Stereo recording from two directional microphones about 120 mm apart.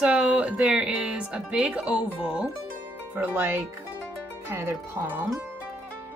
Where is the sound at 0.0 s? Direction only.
10° right (ahead or behind).